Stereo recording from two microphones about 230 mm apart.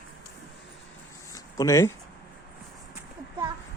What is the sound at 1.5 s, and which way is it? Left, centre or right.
Speech, centre.